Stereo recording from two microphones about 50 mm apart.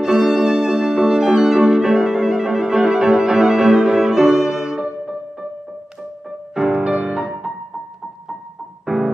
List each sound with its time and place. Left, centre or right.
0.0 s violin: centre
6.5 s music: centre
8.8 s music: centre